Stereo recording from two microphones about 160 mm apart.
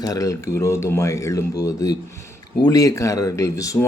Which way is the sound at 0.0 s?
20° left (ahead or behind).